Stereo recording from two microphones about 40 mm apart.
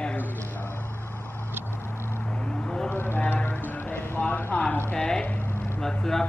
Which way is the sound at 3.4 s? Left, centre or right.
Left.